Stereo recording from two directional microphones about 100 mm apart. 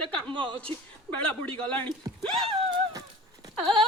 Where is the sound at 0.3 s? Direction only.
55° right (ahead or behind).